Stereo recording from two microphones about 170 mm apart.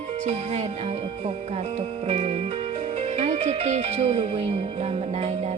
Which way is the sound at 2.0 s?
40° right (ahead or behind).